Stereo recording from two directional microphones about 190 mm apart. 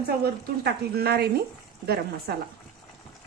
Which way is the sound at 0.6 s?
55° right (ahead or behind).